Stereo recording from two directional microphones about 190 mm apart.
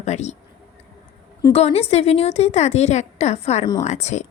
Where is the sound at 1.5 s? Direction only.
35° left (ahead or behind).